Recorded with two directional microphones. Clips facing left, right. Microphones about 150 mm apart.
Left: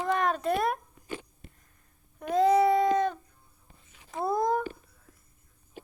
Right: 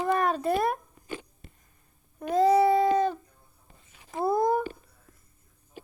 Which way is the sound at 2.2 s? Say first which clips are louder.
Right 1 dB; centre (ahead or behind).